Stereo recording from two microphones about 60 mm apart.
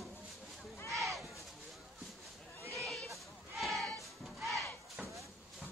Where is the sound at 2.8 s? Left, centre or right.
Centre.